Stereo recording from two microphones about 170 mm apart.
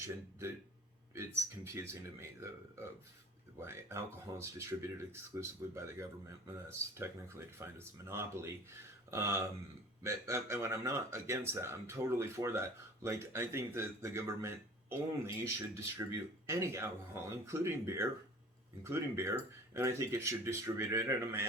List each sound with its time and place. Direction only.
1.6 s speech: 15° right (ahead or behind)